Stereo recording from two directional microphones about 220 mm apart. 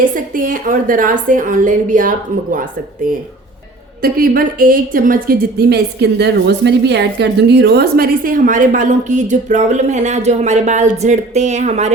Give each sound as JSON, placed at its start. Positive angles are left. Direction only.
{"t": 0.0, "sound": "a woman's voice", "side_deg": -40}
{"t": 4.0, "sound": "a woman's voice", "side_deg": -40}